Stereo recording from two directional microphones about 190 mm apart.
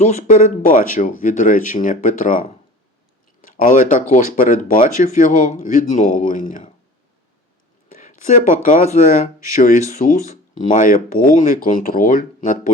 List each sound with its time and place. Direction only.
0.0 s speech: 35° left (ahead or behind)
7.9 s a sound: 40° left (ahead or behind)
8.6 s speech: 45° left (ahead or behind)